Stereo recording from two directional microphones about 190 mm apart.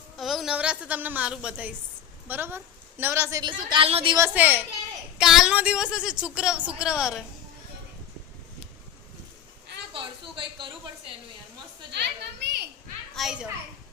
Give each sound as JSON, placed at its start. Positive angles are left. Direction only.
{"t": 0.2, "sound": "a woman's voice", "side_deg": 0}
{"t": 4.2, "sound": "a woman's voice", "side_deg": -10}
{"t": 9.9, "sound": "a sound", "side_deg": -25}
{"t": 11.9, "sound": "children playing", "side_deg": -65}
{"t": 13.1, "sound": "a woman's voice", "side_deg": 0}